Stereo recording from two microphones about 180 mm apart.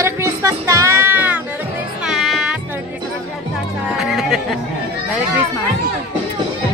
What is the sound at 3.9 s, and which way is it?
Music, centre (ahead or behind).